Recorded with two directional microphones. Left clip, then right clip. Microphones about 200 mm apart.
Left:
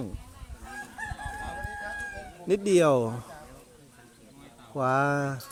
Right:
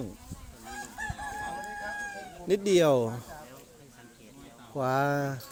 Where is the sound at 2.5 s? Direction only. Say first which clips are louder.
Left 1 dB; 30° left (ahead or behind).